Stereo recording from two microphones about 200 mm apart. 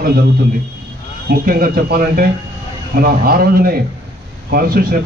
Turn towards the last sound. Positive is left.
turn(degrees=-50)  # may be behind; listen again after turning